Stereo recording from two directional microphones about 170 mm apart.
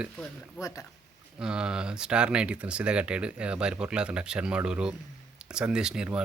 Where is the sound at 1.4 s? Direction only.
5° right (ahead or behind).